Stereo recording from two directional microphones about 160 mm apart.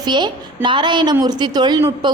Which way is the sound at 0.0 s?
30° right (ahead or behind).